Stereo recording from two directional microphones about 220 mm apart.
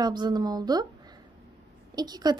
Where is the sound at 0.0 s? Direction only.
20° right (ahead or behind).